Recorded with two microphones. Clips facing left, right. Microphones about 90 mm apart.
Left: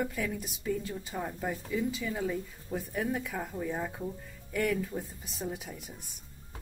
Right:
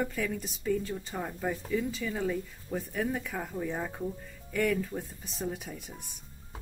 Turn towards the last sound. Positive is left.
turn(degrees=10)  # may be behind; listen again after turning